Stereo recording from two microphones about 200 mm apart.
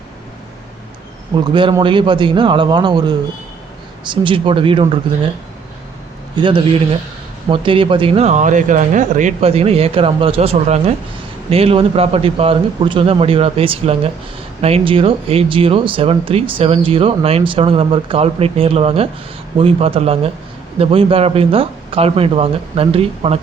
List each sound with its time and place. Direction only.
1.5 s speech: 25° right (ahead or behind)
6.3 s speech: 25° right (ahead or behind)